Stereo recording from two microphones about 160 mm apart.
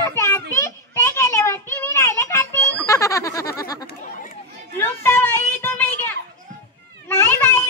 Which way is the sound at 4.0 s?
55° left (ahead or behind).